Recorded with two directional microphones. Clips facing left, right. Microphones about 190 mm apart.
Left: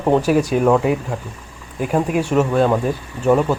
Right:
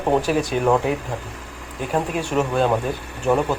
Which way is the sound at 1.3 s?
90° right.